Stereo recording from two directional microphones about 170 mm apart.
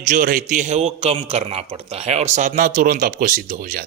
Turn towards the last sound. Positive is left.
turn(degrees=-60)  # may be behind; listen again after turning